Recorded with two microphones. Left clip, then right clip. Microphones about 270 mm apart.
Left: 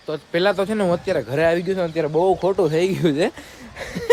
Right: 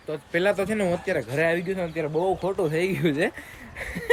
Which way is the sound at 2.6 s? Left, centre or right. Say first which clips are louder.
Left 6 dB; centre.